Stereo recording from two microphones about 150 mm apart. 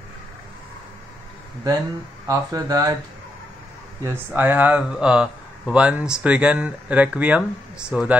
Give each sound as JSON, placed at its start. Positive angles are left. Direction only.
{"t": 2.2, "sound": "speech", "side_deg": -25}
{"t": 4.0, "sound": "speech", "side_deg": -15}